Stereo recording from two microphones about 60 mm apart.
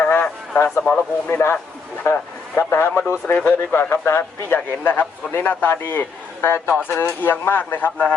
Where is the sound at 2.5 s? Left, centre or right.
Left.